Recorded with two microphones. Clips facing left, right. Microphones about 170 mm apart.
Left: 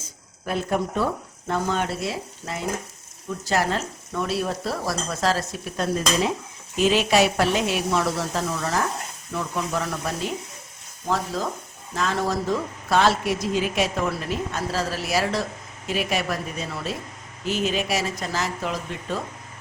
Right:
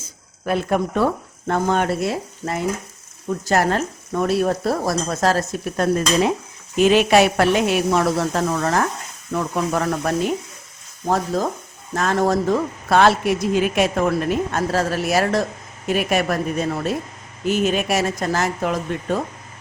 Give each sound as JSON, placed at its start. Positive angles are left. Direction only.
{"t": 0.4, "sound": "a woman's voice", "side_deg": -65}
{"t": 11.9, "sound": "a woman's voice", "side_deg": -50}